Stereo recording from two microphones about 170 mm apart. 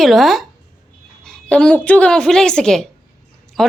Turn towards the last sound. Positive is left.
turn(degrees=0)  # may be behind; listen again after turning